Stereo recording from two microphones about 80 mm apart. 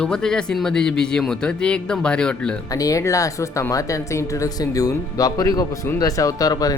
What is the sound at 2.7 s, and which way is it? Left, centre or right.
Speech, left.